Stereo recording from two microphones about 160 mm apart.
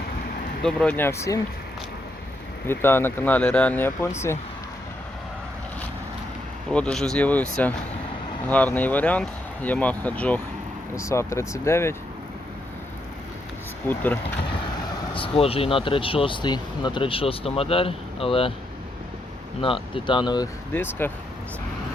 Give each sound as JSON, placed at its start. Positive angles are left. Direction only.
{"t": 0.6, "sound": "speech", "side_deg": 5}
{"t": 2.6, "sound": "speech", "side_deg": 15}
{"t": 6.7, "sound": "speech", "side_deg": 5}
{"t": 8.4, "sound": "speech", "side_deg": 10}
{"t": 13.8, "sound": "speech", "side_deg": 10}
{"t": 15.1, "sound": "speech", "side_deg": 35}
{"t": 19.6, "sound": "speech", "side_deg": 30}
{"t": 20.7, "sound": "speech", "side_deg": 15}